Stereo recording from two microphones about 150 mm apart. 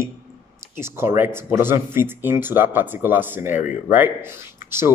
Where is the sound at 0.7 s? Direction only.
15° right (ahead or behind).